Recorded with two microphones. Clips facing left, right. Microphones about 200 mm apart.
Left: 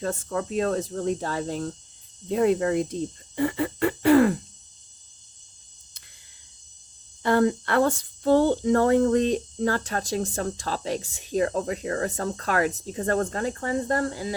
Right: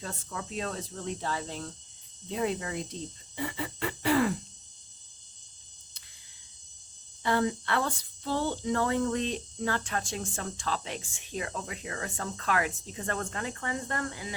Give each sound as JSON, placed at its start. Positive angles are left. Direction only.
{"t": 0.0, "sound": "speech", "side_deg": 50}
{"t": 7.2, "sound": "speech", "side_deg": 50}